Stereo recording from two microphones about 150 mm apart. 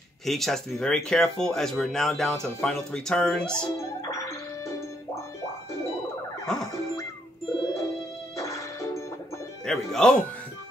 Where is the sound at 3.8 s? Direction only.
20° left (ahead or behind).